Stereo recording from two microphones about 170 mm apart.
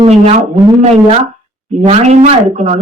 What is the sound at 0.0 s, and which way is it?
Speech, 40° right (ahead or behind).